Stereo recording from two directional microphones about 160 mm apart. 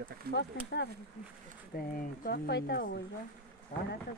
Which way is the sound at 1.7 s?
65° left (ahead or behind).